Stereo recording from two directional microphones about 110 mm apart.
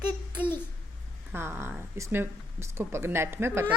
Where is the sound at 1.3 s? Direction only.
20° right (ahead or behind).